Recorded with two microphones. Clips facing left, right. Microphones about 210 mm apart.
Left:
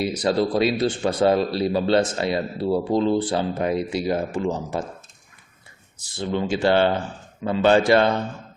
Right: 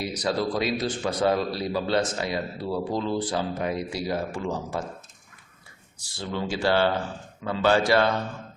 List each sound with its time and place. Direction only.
0.1 s a man's voice: 25° left (ahead or behind)
6.0 s a man's voice: 20° left (ahead or behind)